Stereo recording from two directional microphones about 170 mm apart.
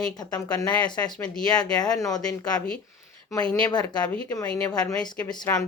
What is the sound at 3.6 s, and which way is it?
Speech, 25° left (ahead or behind).